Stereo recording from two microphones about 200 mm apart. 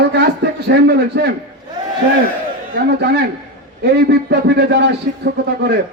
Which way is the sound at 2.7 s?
55° right (ahead or behind).